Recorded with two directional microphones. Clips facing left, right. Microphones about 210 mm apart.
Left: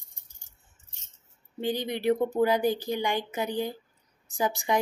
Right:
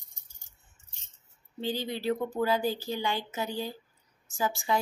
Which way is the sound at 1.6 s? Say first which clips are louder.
Left 3 dB; 15° left (ahead or behind).